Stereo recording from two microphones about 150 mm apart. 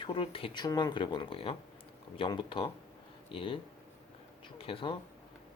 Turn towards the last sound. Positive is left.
turn(degrees=35)  # may be behind; listen again after turning